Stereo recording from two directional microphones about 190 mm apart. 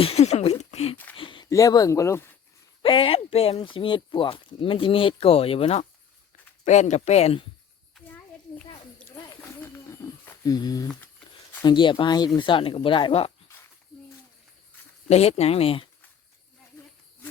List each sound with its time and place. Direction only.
0.0 s speech: 35° left (ahead or behind); by 2.3 s 15° left (ahead or behind)
2.8 s speech: 30° left (ahead or behind)
8.5 s a sound: 5° left (ahead or behind)
10.2 s speech: 20° left (ahead or behind)
15.1 s speech: 35° left (ahead or behind)